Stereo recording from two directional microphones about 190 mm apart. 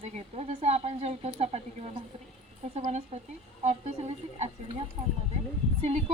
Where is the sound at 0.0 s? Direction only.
35° right (ahead or behind).